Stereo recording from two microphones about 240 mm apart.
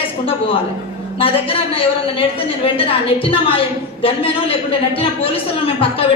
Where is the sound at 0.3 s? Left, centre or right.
Left.